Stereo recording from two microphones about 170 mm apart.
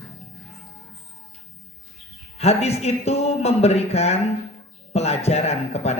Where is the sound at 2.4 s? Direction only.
40° left (ahead or behind).